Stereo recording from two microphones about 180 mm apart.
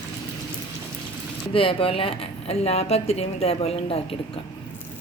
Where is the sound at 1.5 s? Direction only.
30° left (ahead or behind).